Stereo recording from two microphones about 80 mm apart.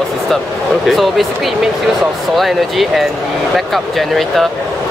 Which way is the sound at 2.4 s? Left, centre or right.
Centre.